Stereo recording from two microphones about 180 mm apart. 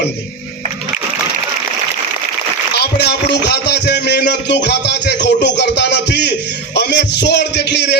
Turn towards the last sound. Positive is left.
turn(degrees=70)  # may be behind; listen again after turning